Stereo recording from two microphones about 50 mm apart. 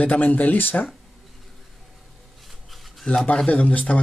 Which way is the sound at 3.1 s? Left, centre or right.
Left.